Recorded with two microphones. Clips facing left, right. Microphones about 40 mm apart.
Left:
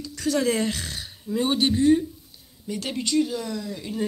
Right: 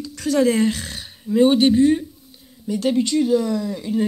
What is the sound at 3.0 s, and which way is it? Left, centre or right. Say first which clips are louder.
Speech: right 2 dB; right.